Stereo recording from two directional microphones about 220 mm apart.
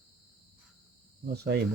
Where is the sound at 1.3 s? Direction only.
45° right (ahead or behind).